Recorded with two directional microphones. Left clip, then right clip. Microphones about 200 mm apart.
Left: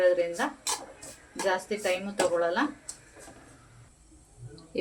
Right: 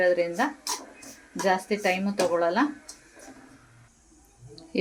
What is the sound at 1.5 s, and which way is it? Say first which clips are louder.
Speech: right 4 dB; 45° right (ahead or behind).